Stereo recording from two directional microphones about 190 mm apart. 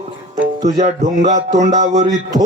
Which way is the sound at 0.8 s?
40° right (ahead or behind).